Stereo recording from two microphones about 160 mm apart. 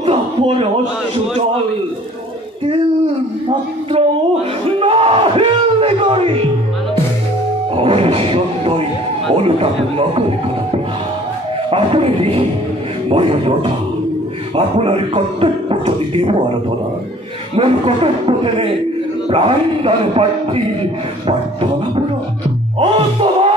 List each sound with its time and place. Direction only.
0.0 s a sound: 35° right (ahead or behind)
3.4 s speech: 35° right (ahead or behind)
7.7 s speech: 35° right (ahead or behind)
11.7 s speech: 35° right (ahead or behind)
17.6 s speech: 35° right (ahead or behind)
22.8 s music: 30° right (ahead or behind)